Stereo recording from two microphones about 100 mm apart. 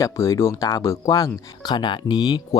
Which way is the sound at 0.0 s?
30° left (ahead or behind).